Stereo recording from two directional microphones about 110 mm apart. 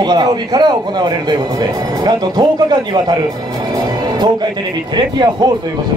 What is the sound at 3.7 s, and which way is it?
Music, 40° right (ahead or behind).